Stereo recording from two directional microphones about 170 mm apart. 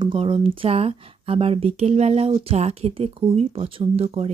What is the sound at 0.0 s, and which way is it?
Speech, 30° right (ahead or behind).